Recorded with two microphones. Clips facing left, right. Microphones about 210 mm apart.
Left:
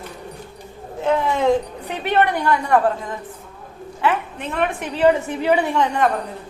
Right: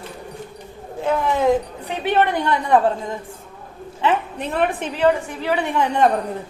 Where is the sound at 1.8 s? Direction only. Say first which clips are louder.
Even; 15° right (ahead or behind).